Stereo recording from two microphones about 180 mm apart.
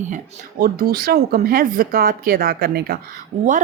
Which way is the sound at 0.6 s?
55° right (ahead or behind).